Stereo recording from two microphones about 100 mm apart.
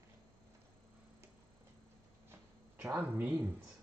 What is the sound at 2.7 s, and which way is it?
Speech, 15° right (ahead or behind).